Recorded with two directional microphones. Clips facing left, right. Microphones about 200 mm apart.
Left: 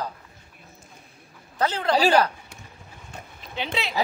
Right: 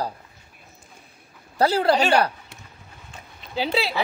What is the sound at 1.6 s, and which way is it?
Speech, 35° right (ahead or behind).